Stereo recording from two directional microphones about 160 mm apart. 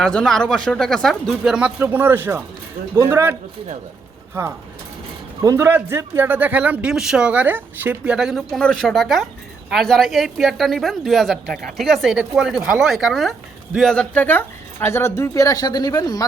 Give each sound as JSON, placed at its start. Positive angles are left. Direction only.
{"t": 0.0, "sound": "speech", "side_deg": 5}
{"t": 5.4, "sound": "speech", "side_deg": -20}